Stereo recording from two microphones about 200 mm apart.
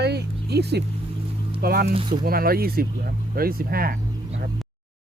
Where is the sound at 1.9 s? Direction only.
25° right (ahead or behind).